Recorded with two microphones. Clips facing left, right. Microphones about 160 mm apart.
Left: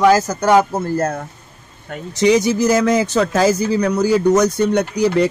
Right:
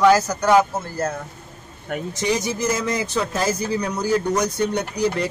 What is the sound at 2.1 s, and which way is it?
Speech, 80° left.